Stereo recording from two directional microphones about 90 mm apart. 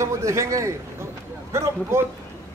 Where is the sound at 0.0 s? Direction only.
35° right (ahead or behind).